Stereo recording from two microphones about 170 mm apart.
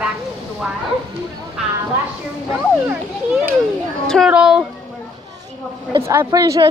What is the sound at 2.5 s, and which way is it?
A child's voice, 10° right (ahead or behind).